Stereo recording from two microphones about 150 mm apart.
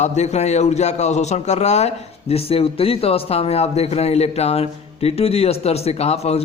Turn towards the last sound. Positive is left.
turn(degrees=45)  # may be behind; listen again after turning